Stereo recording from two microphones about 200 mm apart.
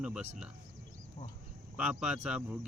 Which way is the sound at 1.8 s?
5° right (ahead or behind).